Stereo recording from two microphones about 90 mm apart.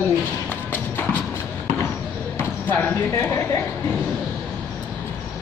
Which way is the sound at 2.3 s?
25° left (ahead or behind).